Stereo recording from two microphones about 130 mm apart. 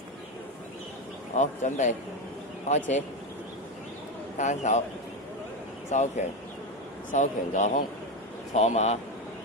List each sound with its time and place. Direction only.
1.3 s speech: 70° left (ahead or behind)
4.4 s a man's voice: 60° left (ahead or behind)
5.9 s a man's voice: 60° left (ahead or behind)
8.5 s a man's voice: 60° left (ahead or behind)